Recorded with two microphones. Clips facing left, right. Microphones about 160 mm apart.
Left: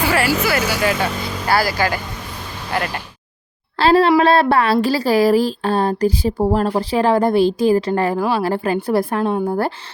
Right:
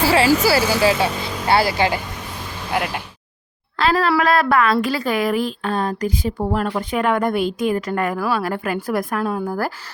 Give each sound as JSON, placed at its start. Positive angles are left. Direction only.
{"t": 0.0, "sound": "vehicle", "side_deg": -30}
{"t": 0.3, "sound": "speech", "side_deg": -30}
{"t": 2.7, "sound": "speech", "side_deg": -10}
{"t": 3.8, "sound": "speech", "side_deg": 30}